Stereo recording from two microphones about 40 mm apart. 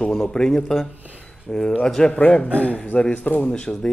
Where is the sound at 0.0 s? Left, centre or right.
Centre.